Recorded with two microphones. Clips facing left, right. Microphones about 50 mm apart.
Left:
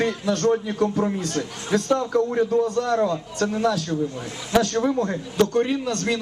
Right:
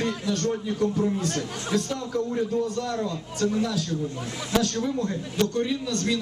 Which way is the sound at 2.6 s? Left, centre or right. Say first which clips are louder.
Left 7 dB; left.